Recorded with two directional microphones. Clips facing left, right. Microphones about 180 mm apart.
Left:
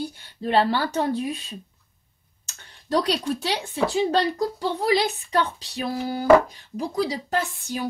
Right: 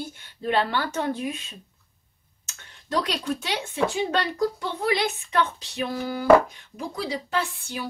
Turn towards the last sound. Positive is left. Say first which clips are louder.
# left 2 dB
turn(degrees=45)  # may be behind; listen again after turning